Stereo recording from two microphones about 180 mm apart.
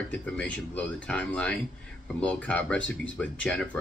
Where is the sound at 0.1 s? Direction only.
5° left (ahead or behind).